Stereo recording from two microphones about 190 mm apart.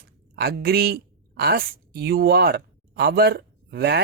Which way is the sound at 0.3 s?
55° right (ahead or behind).